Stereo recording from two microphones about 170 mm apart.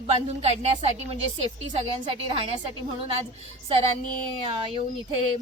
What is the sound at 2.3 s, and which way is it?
A woman's voice, 30° right (ahead or behind).